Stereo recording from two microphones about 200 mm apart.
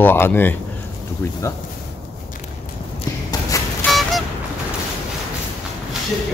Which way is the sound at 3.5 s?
15° left (ahead or behind).